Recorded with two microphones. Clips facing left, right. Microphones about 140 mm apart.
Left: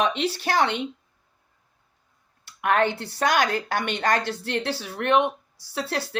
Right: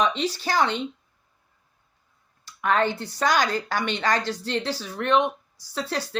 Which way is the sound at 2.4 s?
60° left (ahead or behind).